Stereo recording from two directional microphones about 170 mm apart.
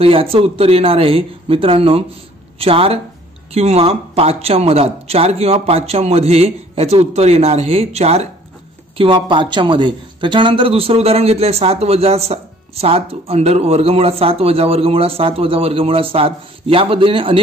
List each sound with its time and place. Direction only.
0.0 s speech: 35° right (ahead or behind)